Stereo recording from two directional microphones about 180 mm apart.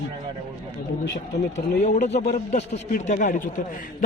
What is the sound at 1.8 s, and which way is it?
A man's voice, 40° left (ahead or behind).